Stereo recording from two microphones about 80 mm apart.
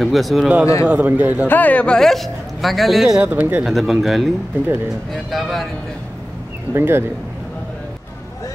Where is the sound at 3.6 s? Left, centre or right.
Centre.